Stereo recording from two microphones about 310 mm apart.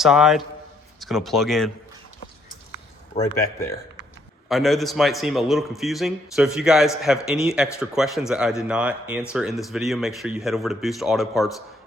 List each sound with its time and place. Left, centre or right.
0.0 s a man's voice: centre
3.1 s speech: left
4.4 s a man's voice: centre